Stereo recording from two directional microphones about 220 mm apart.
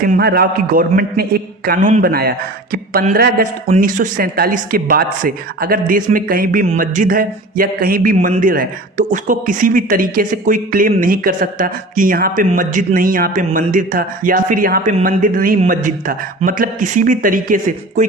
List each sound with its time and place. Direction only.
0.0 s a man's voice: 45° right (ahead or behind)